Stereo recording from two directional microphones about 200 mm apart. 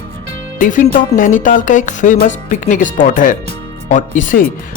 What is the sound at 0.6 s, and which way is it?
Speech, 40° left (ahead or behind).